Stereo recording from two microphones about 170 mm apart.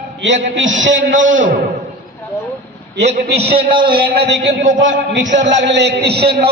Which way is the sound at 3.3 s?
30° right (ahead or behind).